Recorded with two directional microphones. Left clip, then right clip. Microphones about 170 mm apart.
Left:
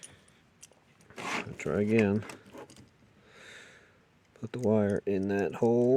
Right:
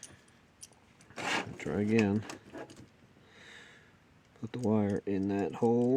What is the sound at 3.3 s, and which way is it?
Snort, 45° left (ahead or behind).